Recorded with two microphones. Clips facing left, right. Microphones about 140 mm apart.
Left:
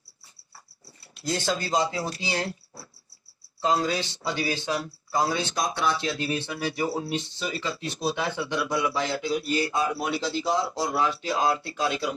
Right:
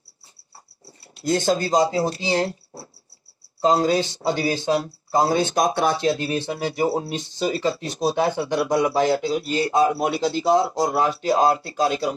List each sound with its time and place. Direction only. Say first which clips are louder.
1.2 s speech: right 7 dB; 45° right (ahead or behind)
9.2 s speech: right 3 dB; 30° right (ahead or behind)
9.7 s speech: right 7 dB; 40° right (ahead or behind)